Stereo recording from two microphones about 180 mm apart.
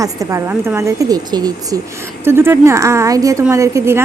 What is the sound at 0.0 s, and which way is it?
A woman's voice, 20° right (ahead or behind).